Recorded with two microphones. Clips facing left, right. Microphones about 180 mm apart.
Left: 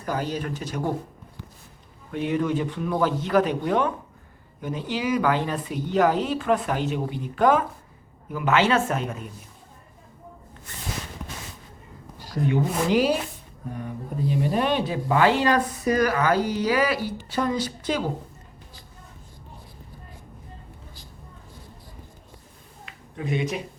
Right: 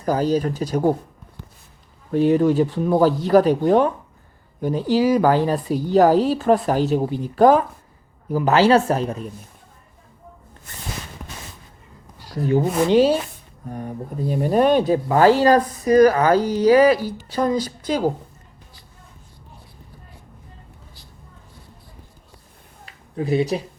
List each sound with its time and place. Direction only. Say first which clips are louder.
0.0 s speech: right 8 dB; 40° right (ahead or behind)
2.1 s speech: right 8 dB; 35° right (ahead or behind)
12.4 s speech: right 5 dB; 35° right (ahead or behind)
13.7 s speech: right 3 dB; 40° right (ahead or behind)
22.9 s a sound: right 7 dB; 35° right (ahead or behind)